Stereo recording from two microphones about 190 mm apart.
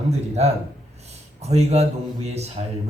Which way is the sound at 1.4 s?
35° right (ahead or behind).